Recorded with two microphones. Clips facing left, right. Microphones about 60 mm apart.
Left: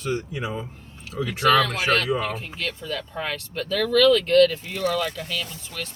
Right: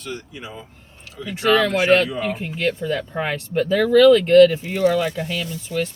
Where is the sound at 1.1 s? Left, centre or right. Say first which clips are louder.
Left 3 dB; left.